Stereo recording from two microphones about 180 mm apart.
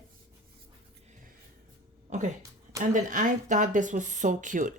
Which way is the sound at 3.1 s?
45° right (ahead or behind).